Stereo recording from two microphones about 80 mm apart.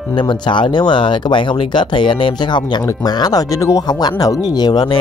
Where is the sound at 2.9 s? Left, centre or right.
Left.